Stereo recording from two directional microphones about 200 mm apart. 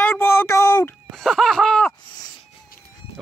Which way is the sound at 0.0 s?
10° left (ahead or behind).